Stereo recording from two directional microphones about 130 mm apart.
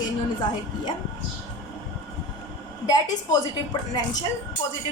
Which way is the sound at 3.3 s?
30° left (ahead or behind).